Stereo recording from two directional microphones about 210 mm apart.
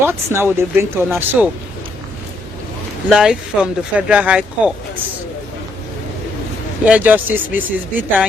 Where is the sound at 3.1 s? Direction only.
Centre (ahead or behind).